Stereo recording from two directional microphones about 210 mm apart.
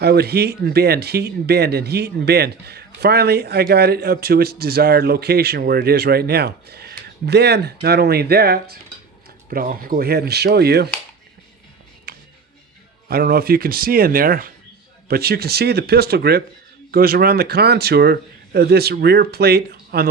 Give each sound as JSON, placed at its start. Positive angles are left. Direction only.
{"t": 0.0, "sound": "speech", "side_deg": -50}
{"t": 12.1, "sound": "music", "side_deg": -45}
{"t": 13.1, "sound": "speech", "side_deg": -45}